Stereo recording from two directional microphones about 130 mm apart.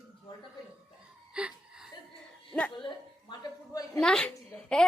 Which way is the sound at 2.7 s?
35° left (ahead or behind).